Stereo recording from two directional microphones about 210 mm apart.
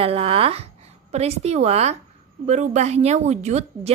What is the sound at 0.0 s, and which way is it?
A woman's voice, 25° right (ahead or behind).